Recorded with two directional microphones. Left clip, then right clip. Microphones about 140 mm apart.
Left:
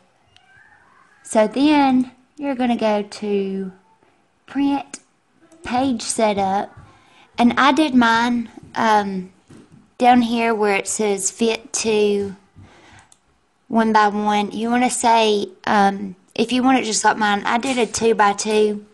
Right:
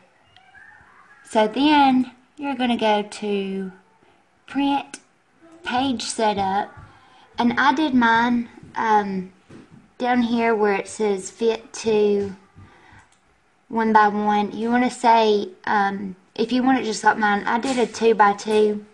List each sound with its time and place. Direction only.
1.3 s a woman's voice: 30° left (ahead or behind)
3.0 s speech: 15° left (ahead or behind)
4.6 s a woman's voice: 25° left (ahead or behind)
7.2 s a woman's voice: 50° left (ahead or behind); by 9.2 s 85° left
9.9 s a woman's voice: 60° left (ahead or behind)
12.7 s a sound: 65° left (ahead or behind)
13.7 s a woman's voice: 60° left (ahead or behind)